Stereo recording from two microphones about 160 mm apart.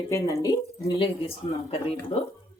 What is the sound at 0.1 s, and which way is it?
Speech, 20° left (ahead or behind).